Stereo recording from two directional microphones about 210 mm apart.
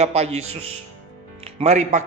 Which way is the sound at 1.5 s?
35° right (ahead or behind).